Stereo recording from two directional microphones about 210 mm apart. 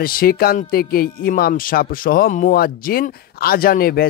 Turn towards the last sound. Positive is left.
turn(degrees=45)  # may be behind; listen again after turning